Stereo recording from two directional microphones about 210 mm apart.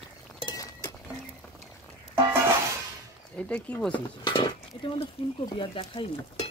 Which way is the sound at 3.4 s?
5° left (ahead or behind).